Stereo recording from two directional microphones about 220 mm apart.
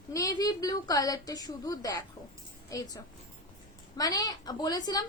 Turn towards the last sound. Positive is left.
turn(degrees=15)  # may be behind; listen again after turning